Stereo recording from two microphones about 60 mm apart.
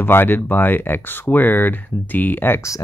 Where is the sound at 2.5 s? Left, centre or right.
Left.